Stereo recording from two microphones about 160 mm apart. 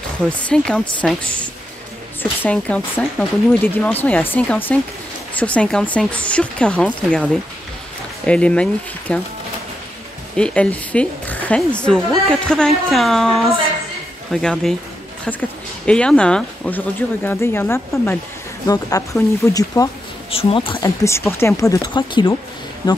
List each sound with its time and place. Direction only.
0.3 s speech: 5° left (ahead or behind)
8.3 s speech: 5° left (ahead or behind)
10.3 s a woman's voice: 5° left (ahead or behind)
15.8 s speech: 5° left (ahead or behind)
20.2 s speech: 35° left (ahead or behind)
20.8 s speech: 15° left (ahead or behind)